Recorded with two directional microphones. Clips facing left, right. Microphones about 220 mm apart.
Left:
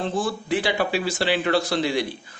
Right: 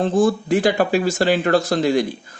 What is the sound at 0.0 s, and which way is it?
Speech, 45° right (ahead or behind).